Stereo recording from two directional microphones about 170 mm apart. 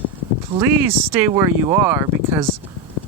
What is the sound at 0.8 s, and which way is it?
Speech, 15° right (ahead or behind).